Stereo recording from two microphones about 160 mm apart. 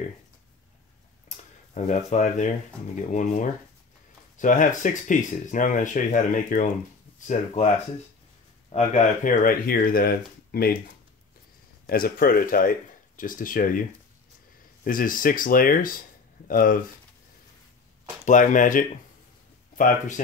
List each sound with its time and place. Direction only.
1.3 s speech: 45° left (ahead or behind)
8.7 s speech: 45° left (ahead or behind)
9.4 s speech: 65° left (ahead or behind)
11.9 s speech: 65° left (ahead or behind)
18.2 s speech: 55° left (ahead or behind)